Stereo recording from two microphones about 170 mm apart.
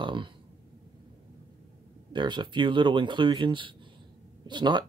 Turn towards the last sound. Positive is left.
turn(degrees=-25)  # may be behind; listen again after turning